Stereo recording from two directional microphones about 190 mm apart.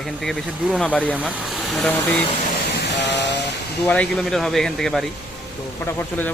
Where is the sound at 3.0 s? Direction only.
65° left (ahead or behind).